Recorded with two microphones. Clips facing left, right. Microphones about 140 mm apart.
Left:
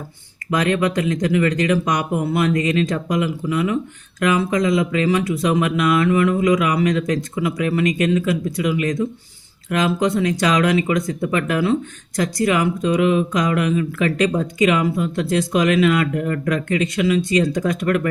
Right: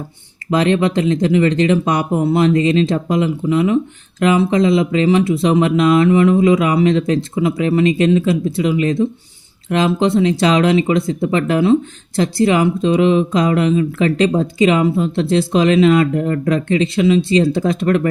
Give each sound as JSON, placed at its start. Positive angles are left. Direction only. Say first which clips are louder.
{"t": 0.5, "sound": "speech", "louder": "right 4 dB", "side_deg": -25}